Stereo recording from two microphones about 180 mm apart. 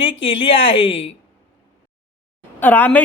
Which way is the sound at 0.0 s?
30° left (ahead or behind).